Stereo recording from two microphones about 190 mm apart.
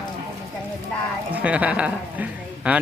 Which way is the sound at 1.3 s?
5° right (ahead or behind).